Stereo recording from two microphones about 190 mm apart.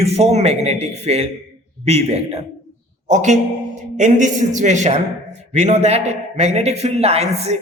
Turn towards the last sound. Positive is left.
turn(degrees=-35)  # may be behind; listen again after turning